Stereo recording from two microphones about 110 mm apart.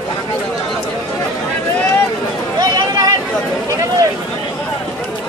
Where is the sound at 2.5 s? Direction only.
35° right (ahead or behind).